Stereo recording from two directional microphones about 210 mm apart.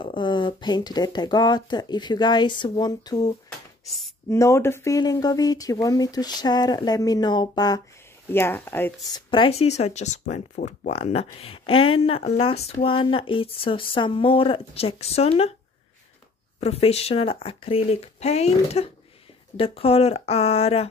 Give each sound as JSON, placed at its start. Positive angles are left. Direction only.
{"t": 0.0, "sound": "speech", "side_deg": 25}
{"t": 9.3, "sound": "speech", "side_deg": 25}
{"t": 16.5, "sound": "speech", "side_deg": 30}